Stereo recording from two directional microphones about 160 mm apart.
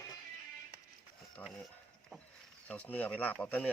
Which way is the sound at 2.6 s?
10° left (ahead or behind).